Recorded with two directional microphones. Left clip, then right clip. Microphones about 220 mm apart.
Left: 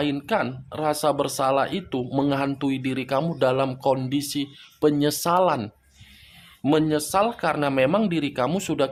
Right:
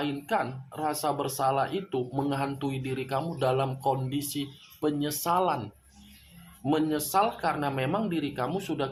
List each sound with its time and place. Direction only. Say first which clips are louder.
0.0 s speech: left 5 dB; 40° left (ahead or behind)